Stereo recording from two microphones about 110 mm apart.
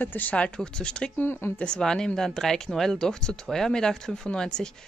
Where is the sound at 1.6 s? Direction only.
5° left (ahead or behind).